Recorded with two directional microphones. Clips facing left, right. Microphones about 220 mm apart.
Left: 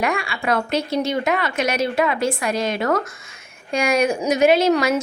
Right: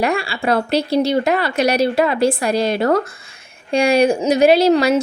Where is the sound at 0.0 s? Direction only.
35° right (ahead or behind).